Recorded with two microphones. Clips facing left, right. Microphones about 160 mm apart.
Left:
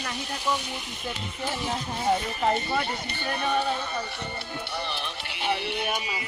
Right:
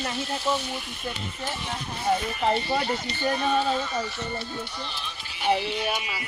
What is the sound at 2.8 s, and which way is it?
Speech, 60° left (ahead or behind).